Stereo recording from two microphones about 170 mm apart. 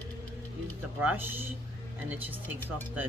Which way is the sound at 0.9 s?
10° right (ahead or behind).